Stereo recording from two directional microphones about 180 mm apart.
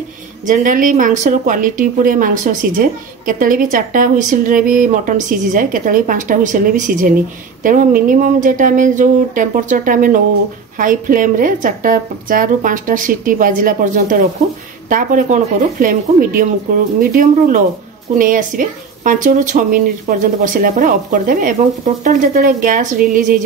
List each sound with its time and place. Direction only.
0.5 s speech: 45° right (ahead or behind)